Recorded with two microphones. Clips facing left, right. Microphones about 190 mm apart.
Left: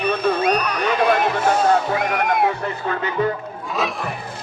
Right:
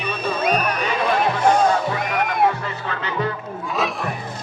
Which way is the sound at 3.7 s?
Centre (ahead or behind).